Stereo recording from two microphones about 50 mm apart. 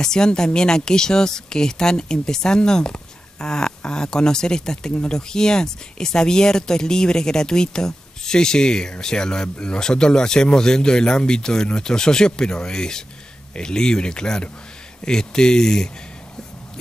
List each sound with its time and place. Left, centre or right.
0.0 s speech: centre